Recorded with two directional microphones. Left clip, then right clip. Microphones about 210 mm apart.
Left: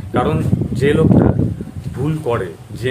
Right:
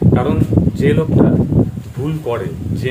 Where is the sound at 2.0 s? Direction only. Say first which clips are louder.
Left 1 dB; 10° left (ahead or behind).